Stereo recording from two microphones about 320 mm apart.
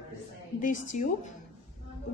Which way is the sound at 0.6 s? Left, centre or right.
Left.